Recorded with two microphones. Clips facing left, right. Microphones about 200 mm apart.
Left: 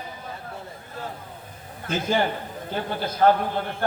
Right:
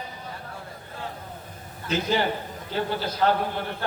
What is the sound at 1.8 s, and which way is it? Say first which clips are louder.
Speech: even; 50° left (ahead or behind).